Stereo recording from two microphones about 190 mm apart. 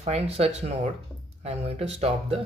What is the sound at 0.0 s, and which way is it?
Speech, 35° right (ahead or behind).